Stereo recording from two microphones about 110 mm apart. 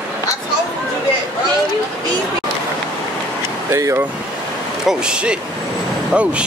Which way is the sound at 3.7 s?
25° right (ahead or behind).